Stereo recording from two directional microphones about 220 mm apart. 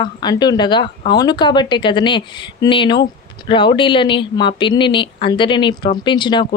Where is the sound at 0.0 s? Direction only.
20° left (ahead or behind).